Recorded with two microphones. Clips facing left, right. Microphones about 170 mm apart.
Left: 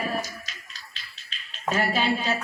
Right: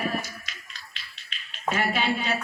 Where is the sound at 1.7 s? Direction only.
40° left (ahead or behind).